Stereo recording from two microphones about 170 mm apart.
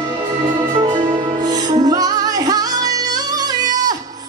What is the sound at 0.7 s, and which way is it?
Music, 25° right (ahead or behind).